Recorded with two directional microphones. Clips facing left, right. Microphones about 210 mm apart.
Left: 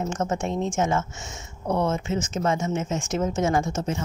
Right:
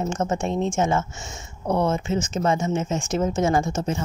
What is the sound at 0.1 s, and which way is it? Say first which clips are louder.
Speech: right 2 dB; 30° right (ahead or behind).